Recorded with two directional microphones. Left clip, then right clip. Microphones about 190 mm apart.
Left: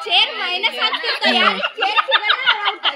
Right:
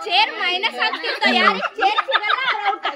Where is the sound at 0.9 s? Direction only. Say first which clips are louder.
Left 1 dB; 65° right (ahead or behind).